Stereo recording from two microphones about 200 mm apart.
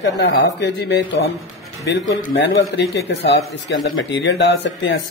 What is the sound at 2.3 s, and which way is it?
Speech, 70° left (ahead or behind).